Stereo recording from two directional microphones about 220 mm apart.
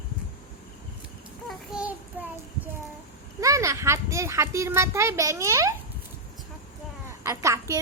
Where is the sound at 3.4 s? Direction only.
15° right (ahead or behind).